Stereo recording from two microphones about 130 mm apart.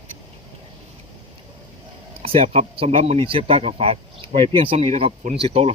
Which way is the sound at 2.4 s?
60° right (ahead or behind).